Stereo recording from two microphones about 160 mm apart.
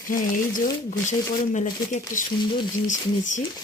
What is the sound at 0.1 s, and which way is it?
Speech, 60° left (ahead or behind).